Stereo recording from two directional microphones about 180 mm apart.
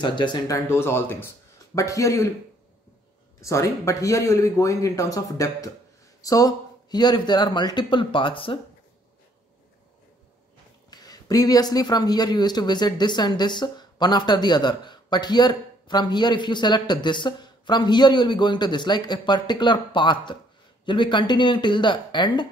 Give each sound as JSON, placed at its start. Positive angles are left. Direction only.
{"t": 0.0, "sound": "speech", "side_deg": 25}
{"t": 0.7, "sound": "speech", "side_deg": 15}
{"t": 3.3, "sound": "speech", "side_deg": 15}
{"t": 10.9, "sound": "speech", "side_deg": 20}